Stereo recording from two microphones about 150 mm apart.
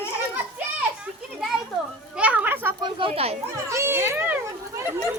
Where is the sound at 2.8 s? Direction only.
35° right (ahead or behind).